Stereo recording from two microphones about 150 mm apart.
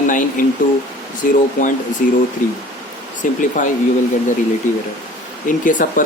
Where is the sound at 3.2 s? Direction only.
55° left (ahead or behind).